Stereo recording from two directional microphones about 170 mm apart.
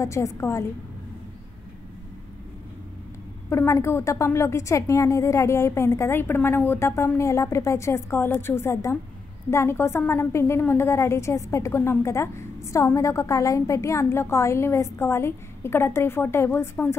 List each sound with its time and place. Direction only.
0.0 s a woman's voice: 15° left (ahead or behind)
3.4 s a woman's voice: 15° left (ahead or behind)